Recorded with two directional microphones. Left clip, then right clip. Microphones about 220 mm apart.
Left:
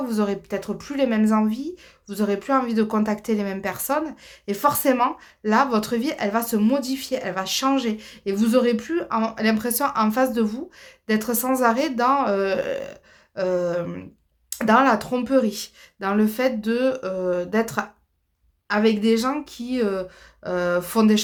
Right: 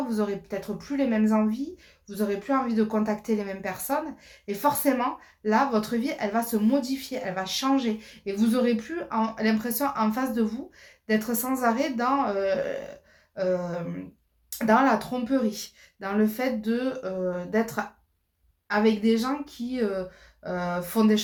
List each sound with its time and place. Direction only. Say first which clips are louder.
0.1 s speech: left 4 dB; 50° left (ahead or behind)